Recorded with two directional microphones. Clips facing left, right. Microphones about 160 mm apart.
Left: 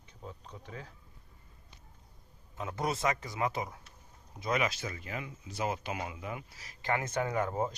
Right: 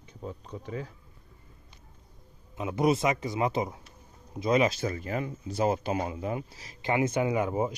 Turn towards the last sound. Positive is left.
turn(degrees=-10)  # may be behind; listen again after turning